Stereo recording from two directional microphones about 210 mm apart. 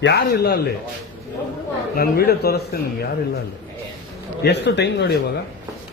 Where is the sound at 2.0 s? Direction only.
50° left (ahead or behind).